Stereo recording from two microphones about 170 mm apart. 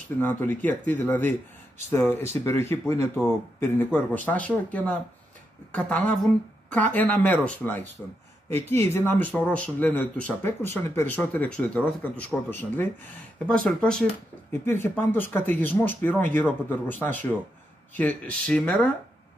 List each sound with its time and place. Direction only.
0.2 s speech: 10° left (ahead or behind)
8.9 s speech: 10° left (ahead or behind)